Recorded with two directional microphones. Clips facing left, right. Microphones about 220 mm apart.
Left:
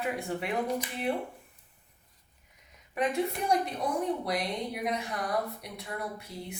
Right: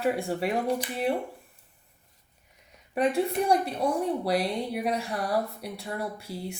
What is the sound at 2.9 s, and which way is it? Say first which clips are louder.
Speech: right 4 dB; 30° right (ahead or behind).